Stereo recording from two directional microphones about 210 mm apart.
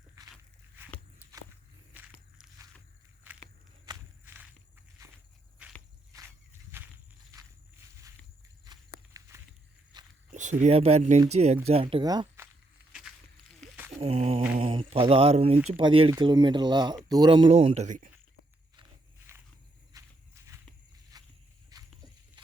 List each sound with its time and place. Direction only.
1.9 s walk: 5° right (ahead or behind)
3.3 s walk: 10° right (ahead or behind)
6.1 s walk: 15° right (ahead or behind)
8.7 s walk: 20° right (ahead or behind)
9.2 s a sound: 15° right (ahead or behind)
9.9 s walk: 20° right (ahead or behind)
10.3 s speech: 35° right (ahead or behind); by 12.5 s 20° right (ahead or behind)
14.0 s mantra: 30° right (ahead or behind)
15.7 s speech: 25° right (ahead or behind)
17.8 s speech: 40° right (ahead or behind)
19.3 s walk: 10° right (ahead or behind)
21.7 s a sound: 15° right (ahead or behind)